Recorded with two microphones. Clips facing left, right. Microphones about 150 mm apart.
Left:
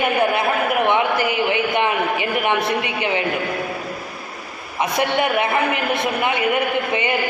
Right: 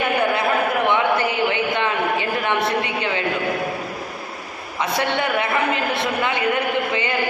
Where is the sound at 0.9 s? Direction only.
20° left (ahead or behind).